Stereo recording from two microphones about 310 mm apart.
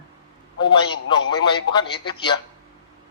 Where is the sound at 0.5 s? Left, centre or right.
Centre.